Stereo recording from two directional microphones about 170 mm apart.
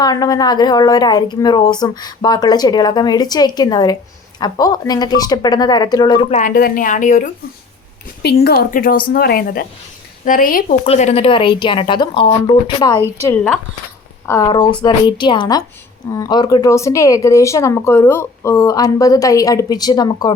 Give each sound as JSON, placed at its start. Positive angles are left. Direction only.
{"t": 0.0, "sound": "speech", "side_deg": 20}
{"t": 6.3, "sound": "speech", "side_deg": 50}
{"t": 8.2, "sound": "a woman's voice", "side_deg": 70}
{"t": 10.8, "sound": "speech", "side_deg": 40}
{"t": 13.2, "sound": "speech", "side_deg": 10}
{"t": 14.3, "sound": "speech", "side_deg": 20}